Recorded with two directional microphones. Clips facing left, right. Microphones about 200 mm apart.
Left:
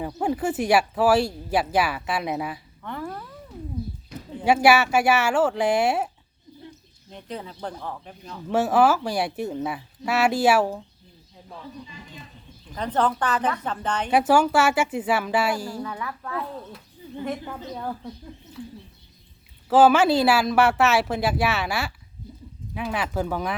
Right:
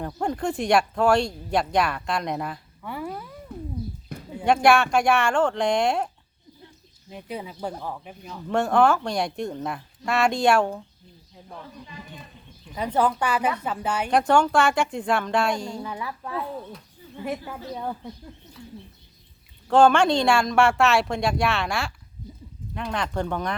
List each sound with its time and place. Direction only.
0.2 s speech: 5° left (ahead or behind)
2.8 s a sound: 10° right (ahead or behind)
3.5 s a sound: 55° right (ahead or behind)
4.4 s speech: 5° left (ahead or behind)
7.1 s speech: 10° right (ahead or behind)
8.4 s speech: 5° left (ahead or behind)
12.6 s speech: 10° right (ahead or behind)
14.1 s speech: 5° left (ahead or behind)
15.8 s speech: 15° right (ahead or behind)
19.7 s speech: 5° left (ahead or behind)